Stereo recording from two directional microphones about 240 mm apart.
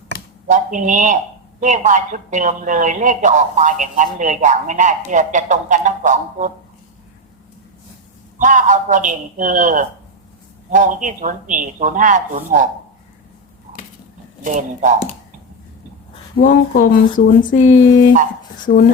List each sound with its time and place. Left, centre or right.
0.4 s a man's voice: right
8.4 s a man's voice: right
14.4 s a man's voice: right
16.4 s speech: left